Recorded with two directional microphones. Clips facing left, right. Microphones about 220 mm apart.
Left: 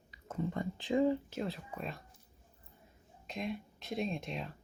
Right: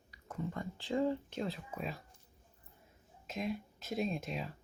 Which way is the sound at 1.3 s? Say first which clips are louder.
Even; centre (ahead or behind).